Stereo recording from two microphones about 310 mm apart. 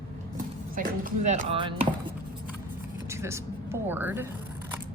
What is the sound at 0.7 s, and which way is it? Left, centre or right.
Speech, right.